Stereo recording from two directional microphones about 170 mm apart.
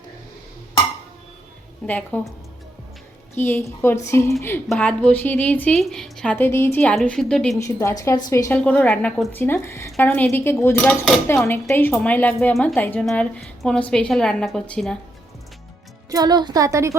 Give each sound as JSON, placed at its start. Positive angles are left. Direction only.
{"t": 1.9, "sound": "a woman's voice", "side_deg": 10}
{"t": 3.3, "sound": "a woman's voice", "side_deg": 15}
{"t": 7.6, "sound": "a woman's voice", "side_deg": 15}
{"t": 16.0, "sound": "speech", "side_deg": -20}